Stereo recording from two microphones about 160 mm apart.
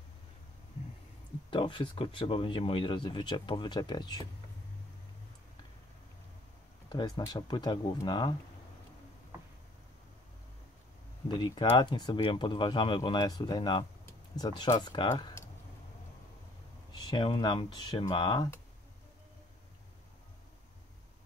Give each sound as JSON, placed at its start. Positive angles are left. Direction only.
{"t": 1.5, "sound": "speech", "side_deg": 30}
{"t": 6.9, "sound": "speech", "side_deg": 25}
{"t": 11.2, "sound": "speech", "side_deg": 30}
{"t": 17.0, "sound": "speech", "side_deg": 30}